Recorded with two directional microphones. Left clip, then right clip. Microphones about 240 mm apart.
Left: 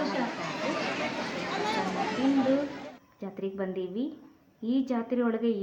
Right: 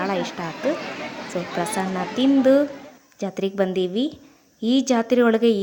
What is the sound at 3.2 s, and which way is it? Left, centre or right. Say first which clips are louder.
A woman's voice: right 12 dB; right.